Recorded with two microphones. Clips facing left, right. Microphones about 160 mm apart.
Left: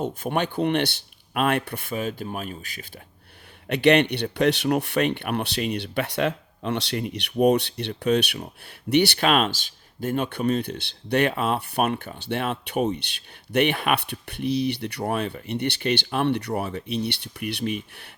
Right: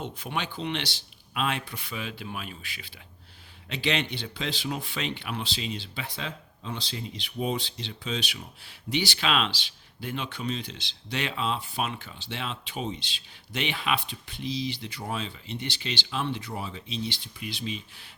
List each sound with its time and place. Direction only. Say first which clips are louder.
0.0 s speech: left 8 dB; 50° left (ahead or behind)
3.7 s speech: left 11 dB; 65° left (ahead or behind)